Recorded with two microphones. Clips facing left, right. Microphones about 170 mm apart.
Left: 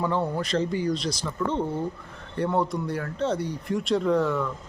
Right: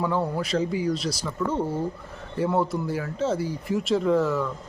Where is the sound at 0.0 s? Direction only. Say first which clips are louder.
Even; 5° right (ahead or behind).